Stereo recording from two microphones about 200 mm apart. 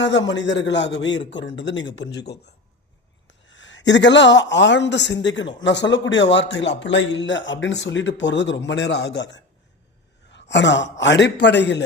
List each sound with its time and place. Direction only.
0.0 s a man's voice: 60° left (ahead or behind)
10.5 s a man's voice: 60° left (ahead or behind)